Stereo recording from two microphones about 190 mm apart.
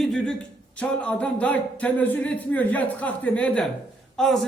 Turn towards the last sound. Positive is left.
turn(degrees=0)  # may be behind; listen again after turning